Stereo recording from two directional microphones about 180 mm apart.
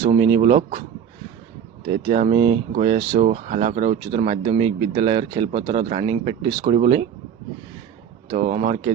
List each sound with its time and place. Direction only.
0.0 s speech: 30° right (ahead or behind)
1.9 s speech: 35° right (ahead or behind)
8.3 s speech: 35° right (ahead or behind)